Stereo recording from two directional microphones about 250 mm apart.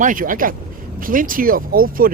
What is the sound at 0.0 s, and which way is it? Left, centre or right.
Speech, right.